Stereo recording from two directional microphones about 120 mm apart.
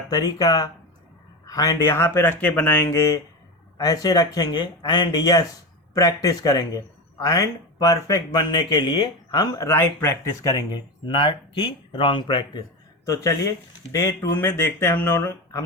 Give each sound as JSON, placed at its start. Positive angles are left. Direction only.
{"t": 0.1, "sound": "speech", "side_deg": 35}
{"t": 2.9, "sound": "speech", "side_deg": 25}
{"t": 9.6, "sound": "speech", "side_deg": 20}
{"t": 13.1, "sound": "speech", "side_deg": 25}
{"t": 14.3, "sound": "speech", "side_deg": 15}